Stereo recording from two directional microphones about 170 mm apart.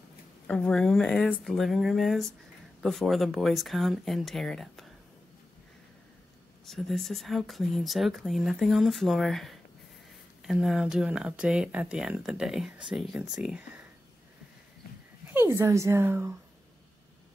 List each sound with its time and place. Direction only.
0.5 s speech: 5° left (ahead or behind)
6.6 s speech: centre (ahead or behind)
15.2 s speech: 15° right (ahead or behind)